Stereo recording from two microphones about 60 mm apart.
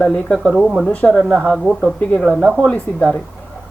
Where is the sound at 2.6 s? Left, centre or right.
Left.